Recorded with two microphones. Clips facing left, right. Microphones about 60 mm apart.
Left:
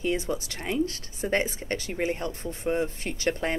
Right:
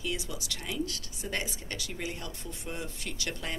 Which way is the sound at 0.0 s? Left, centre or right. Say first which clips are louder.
Left 8 dB; left.